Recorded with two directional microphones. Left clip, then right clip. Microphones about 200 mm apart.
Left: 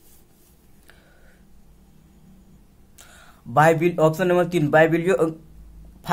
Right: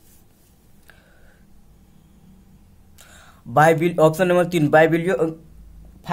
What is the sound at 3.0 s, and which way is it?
Speech, centre (ahead or behind).